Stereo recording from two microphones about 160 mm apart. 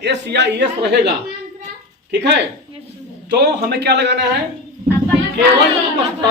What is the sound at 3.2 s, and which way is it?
Speech, 90° right.